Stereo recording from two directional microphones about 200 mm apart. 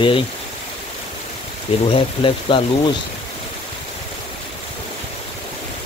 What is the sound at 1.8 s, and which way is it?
Speech, 25° left (ahead or behind).